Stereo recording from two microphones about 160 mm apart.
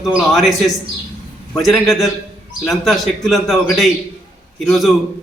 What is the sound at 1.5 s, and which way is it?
A man's voice, centre (ahead or behind).